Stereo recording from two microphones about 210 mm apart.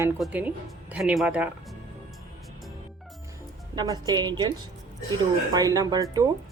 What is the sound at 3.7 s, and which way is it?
A woman's voice, 20° right (ahead or behind).